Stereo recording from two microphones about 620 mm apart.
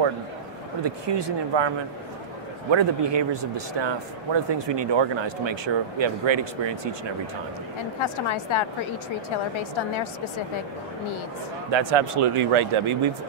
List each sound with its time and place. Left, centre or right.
0.8 s a man's voice: right
2.7 s a man's voice: right
8.0 s a woman's voice: left
11.7 s a man's voice: right